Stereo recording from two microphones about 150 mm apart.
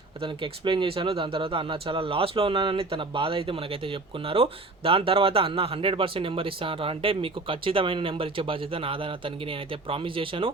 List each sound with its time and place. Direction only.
0.2 s speech: 35° right (ahead or behind)